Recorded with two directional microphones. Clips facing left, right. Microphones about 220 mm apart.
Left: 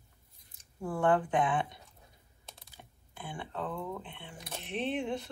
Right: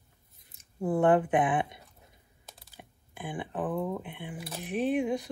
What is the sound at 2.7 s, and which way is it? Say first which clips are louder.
Speech: right 5 dB; 15° right (ahead or behind).